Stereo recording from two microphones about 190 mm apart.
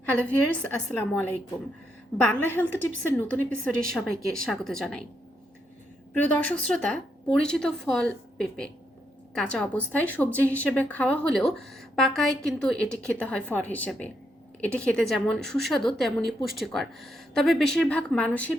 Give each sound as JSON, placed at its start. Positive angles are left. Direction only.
{"t": 0.0, "sound": "speech", "side_deg": 10}
{"t": 2.3, "sound": "a woman's voice", "side_deg": 10}
{"t": 6.1, "sound": "a woman's voice", "side_deg": 10}